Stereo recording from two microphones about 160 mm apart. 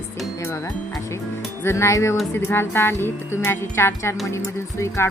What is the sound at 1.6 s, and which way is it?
Speech, 15° left (ahead or behind).